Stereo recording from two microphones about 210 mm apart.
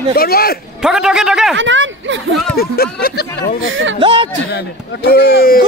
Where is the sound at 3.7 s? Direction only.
65° right (ahead or behind).